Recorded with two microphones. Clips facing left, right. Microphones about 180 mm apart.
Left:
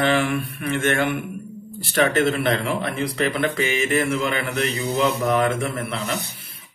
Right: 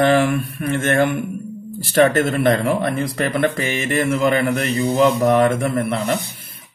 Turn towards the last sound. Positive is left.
turn(degrees=-50)  # may be behind; listen again after turning